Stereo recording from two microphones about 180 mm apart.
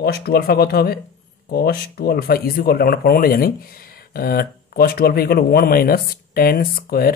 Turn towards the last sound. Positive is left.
turn(degrees=55)  # may be behind; listen again after turning